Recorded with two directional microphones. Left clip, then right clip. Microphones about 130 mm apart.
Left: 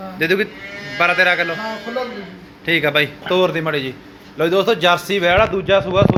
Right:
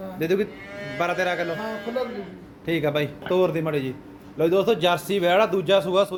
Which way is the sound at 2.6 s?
15° right (ahead or behind).